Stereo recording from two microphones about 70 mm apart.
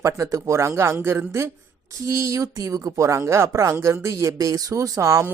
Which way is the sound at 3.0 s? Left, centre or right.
Right.